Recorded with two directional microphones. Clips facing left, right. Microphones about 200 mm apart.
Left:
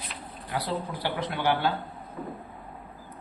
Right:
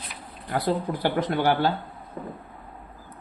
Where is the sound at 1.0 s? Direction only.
45° right (ahead or behind).